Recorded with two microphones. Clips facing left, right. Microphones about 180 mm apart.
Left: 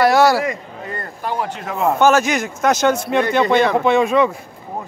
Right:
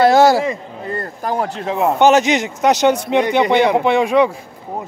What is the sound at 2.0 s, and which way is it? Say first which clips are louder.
A man's voice: right 3 dB; 20° right (ahead or behind).